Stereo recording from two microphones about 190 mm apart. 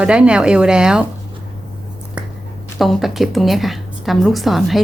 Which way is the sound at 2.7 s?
Centre (ahead or behind).